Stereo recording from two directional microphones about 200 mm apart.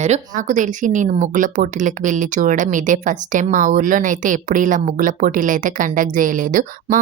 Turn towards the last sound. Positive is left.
turn(degrees=-40)  # may be behind; listen again after turning